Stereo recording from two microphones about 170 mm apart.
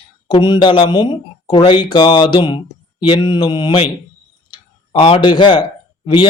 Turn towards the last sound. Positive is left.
turn(degrees=30)  # may be behind; listen again after turning